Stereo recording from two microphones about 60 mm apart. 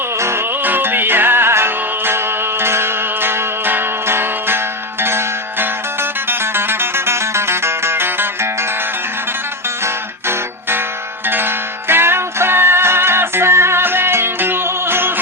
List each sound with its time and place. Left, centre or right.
0.2 s music: right
0.6 s music: right
9.8 s music: right